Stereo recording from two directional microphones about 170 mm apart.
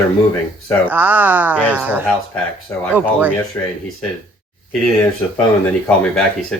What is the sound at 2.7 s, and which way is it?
Speech, 15° left (ahead or behind).